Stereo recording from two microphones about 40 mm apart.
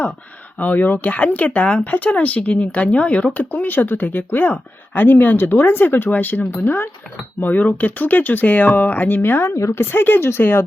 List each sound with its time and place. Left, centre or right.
0.6 s speech: left
3.3 s speech: left